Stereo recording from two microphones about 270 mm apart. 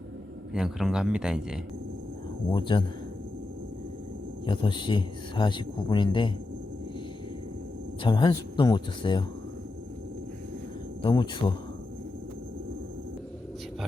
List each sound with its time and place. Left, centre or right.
0.5 s speech: centre
2.5 s speech: centre
4.4 s speech: centre
8.0 s speech: centre
11.0 s speech: centre